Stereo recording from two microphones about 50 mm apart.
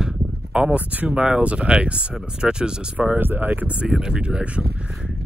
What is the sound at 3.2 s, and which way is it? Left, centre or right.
Speech, right.